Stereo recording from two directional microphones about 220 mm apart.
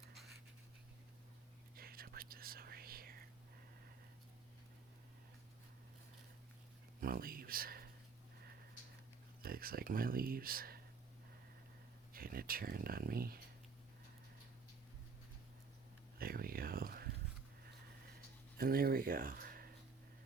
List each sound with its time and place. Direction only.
1.7 s whispering: 45° right (ahead or behind)
7.0 s speech: 40° right (ahead or behind)
9.4 s speech: 40° right (ahead or behind)
12.1 s speech: 40° right (ahead or behind)
16.1 s speech: 40° right (ahead or behind)
18.5 s speech: 40° right (ahead or behind)